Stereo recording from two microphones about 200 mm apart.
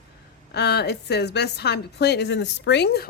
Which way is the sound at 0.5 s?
55° left (ahead or behind).